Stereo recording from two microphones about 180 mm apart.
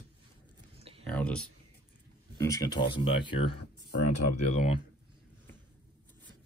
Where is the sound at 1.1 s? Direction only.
5° left (ahead or behind).